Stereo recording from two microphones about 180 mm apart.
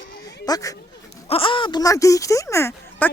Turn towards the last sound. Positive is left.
turn(degrees=15)  # may be behind; listen again after turning